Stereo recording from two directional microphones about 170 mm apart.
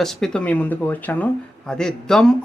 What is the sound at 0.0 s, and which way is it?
Speech, centre (ahead or behind).